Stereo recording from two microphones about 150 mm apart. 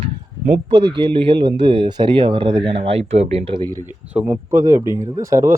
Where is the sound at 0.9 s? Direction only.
35° right (ahead or behind).